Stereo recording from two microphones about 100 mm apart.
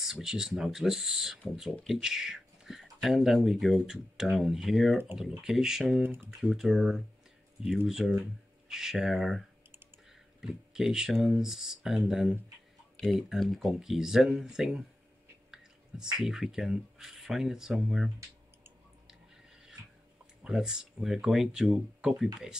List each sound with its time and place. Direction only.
0.0 s speech: 5° right (ahead or behind)
6.0 s speech: 20° right (ahead or behind)
6.5 s speech: 5° right (ahead or behind)
10.4 s speech: 5° right (ahead or behind)
20.4 s speech: 5° right (ahead or behind)